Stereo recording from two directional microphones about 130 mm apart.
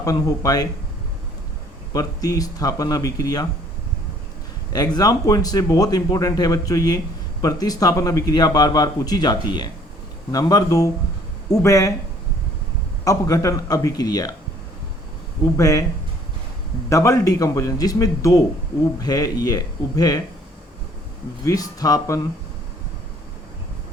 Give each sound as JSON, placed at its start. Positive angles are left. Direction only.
{"t": 0.0, "sound": "speech", "side_deg": 25}
{"t": 1.9, "sound": "speech", "side_deg": 25}
{"t": 4.7, "sound": "speech", "side_deg": 30}
{"t": 13.1, "sound": "speech", "side_deg": 25}
{"t": 15.5, "sound": "speech", "side_deg": 25}
{"t": 16.9, "sound": "speech", "side_deg": 25}
{"t": 21.4, "sound": "speech", "side_deg": 25}